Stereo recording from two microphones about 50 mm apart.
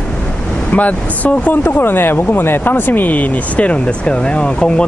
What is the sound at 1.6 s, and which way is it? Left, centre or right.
Speech, left.